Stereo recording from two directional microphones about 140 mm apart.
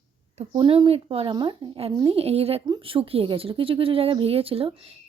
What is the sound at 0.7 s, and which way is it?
Speech, 40° right (ahead or behind).